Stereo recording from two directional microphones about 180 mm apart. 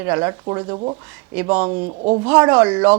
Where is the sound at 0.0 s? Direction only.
15° right (ahead or behind).